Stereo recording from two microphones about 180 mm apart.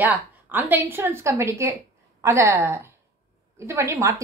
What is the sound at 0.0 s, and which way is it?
A woman's voice, 10° right (ahead or behind).